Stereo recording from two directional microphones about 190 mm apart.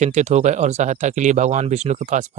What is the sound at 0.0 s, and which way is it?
Speech, 40° right (ahead or behind).